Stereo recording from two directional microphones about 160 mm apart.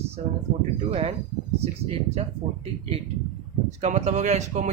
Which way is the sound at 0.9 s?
40° right (ahead or behind).